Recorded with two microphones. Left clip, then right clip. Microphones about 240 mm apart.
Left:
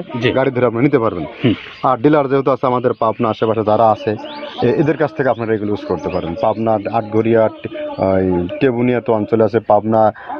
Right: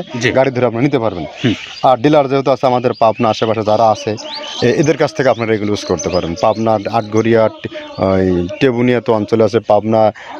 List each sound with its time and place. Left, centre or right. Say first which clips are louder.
0.2 s speech: right 2 dB; right
4.6 s speech: right 2 dB; right
8.5 s speech: right 3 dB; right